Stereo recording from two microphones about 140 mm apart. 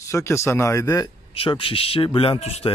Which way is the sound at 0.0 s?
20° left (ahead or behind).